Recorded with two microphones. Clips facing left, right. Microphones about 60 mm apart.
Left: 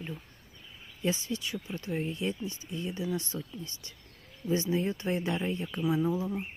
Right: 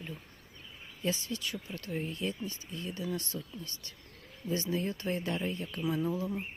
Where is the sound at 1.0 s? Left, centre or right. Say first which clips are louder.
Left 3 dB; centre.